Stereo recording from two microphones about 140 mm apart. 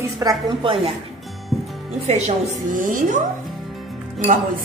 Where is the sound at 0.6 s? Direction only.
40° right (ahead or behind).